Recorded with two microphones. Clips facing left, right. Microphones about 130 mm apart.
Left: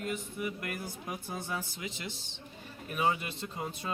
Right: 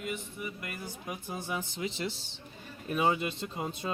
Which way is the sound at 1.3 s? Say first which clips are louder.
Right 3 dB; 20° right (ahead or behind).